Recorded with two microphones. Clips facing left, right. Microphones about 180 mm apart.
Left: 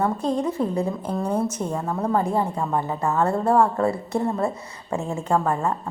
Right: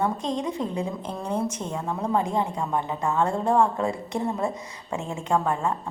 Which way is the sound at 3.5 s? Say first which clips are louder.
Left 3 dB; 15° right (ahead or behind).